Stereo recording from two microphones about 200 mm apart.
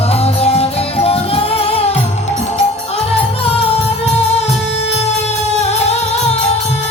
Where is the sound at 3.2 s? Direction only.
30° left (ahead or behind).